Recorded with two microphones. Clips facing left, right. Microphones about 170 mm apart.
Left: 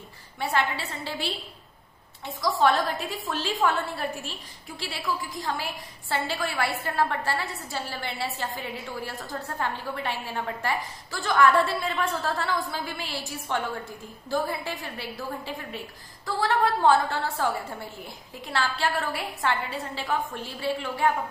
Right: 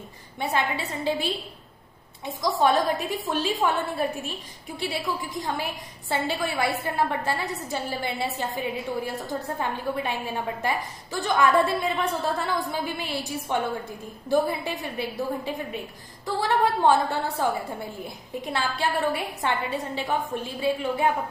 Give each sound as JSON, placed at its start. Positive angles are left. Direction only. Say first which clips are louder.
{"t": 0.4, "sound": "a woman's voice", "louder": "right 1 dB", "side_deg": -20}